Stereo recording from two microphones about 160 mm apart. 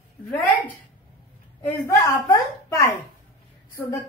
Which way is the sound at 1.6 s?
15° left (ahead or behind).